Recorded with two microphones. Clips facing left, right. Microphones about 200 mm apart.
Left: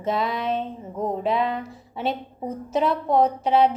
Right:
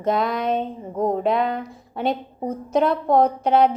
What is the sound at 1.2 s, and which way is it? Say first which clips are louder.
A woman's voice: right 2 dB; centre (ahead or behind).